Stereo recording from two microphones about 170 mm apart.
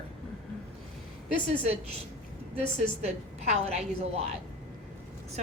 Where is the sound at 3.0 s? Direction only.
40° right (ahead or behind).